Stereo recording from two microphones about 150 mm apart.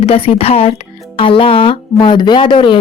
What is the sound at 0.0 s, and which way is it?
Speech, 40° left (ahead or behind).